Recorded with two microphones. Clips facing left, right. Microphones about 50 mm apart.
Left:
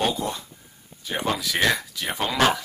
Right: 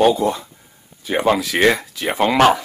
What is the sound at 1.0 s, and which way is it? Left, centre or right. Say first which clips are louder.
Speech: right 9 dB; right.